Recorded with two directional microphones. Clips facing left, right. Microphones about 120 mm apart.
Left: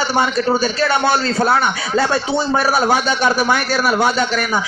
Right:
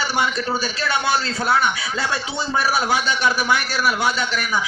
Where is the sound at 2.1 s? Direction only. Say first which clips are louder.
Left 7 dB; 30° left (ahead or behind).